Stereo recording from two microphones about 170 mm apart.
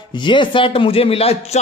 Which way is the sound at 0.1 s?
25° left (ahead or behind).